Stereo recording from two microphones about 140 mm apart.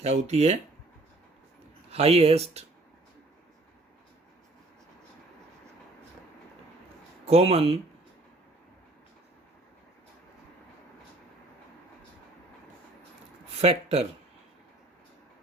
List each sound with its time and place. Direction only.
0.0 s speech: 50° right (ahead or behind)
1.9 s speech: 45° right (ahead or behind)
7.3 s speech: 45° right (ahead or behind)
13.5 s speech: 45° right (ahead or behind)